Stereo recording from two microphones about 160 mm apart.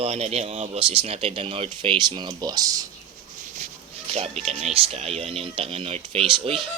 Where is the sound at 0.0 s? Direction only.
40° right (ahead or behind); by 2.8 s 25° right (ahead or behind).